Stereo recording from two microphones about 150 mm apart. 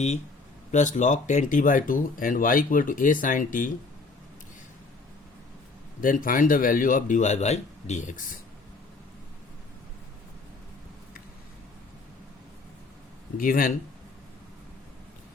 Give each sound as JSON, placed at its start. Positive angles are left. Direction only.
{"t": 0.7, "sound": "speech", "side_deg": 55}
{"t": 6.0, "sound": "speech", "side_deg": 65}
{"t": 13.3, "sound": "speech", "side_deg": 70}